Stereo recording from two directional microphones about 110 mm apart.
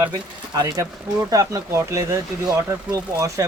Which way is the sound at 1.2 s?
30° right (ahead or behind).